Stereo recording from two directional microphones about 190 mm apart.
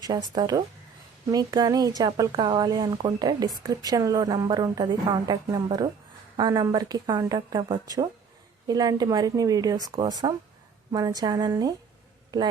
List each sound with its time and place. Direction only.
0.0 s speech: 20° right (ahead or behind)